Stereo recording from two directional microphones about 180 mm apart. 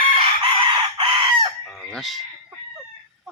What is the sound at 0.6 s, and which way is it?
Chicken, 25° right (ahead or behind).